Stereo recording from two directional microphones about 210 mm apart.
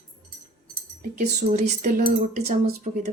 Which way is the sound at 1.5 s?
35° right (ahead or behind).